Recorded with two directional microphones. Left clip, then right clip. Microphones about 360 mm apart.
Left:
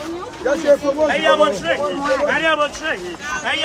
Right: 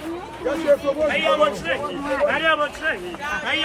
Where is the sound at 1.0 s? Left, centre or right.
Left.